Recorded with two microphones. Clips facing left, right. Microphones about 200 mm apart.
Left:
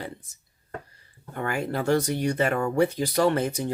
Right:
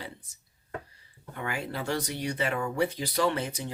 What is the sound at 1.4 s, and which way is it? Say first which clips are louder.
Speech: left 6 dB; 50° left (ahead or behind).